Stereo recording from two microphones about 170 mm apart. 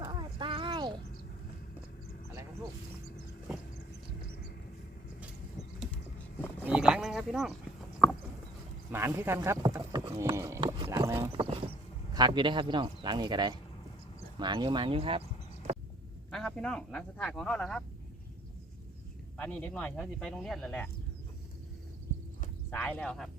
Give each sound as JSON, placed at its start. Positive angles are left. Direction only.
{"t": 0.0, "sound": "a sound", "side_deg": -25}
{"t": 6.6, "sound": "sheep", "side_deg": -5}
{"t": 8.9, "sound": "speech", "side_deg": -15}
{"t": 10.3, "sound": "clip-clop", "side_deg": -15}
{"t": 10.6, "sound": "a sound", "side_deg": -25}
{"t": 10.9, "sound": "clip-clop", "side_deg": -15}
{"t": 11.3, "sound": "clip-clop", "side_deg": -35}
{"t": 12.1, "sound": "speech", "side_deg": -25}
{"t": 16.3, "sound": "speech", "side_deg": 0}
{"t": 19.4, "sound": "speech", "side_deg": 10}
{"t": 22.7, "sound": "speech", "side_deg": 5}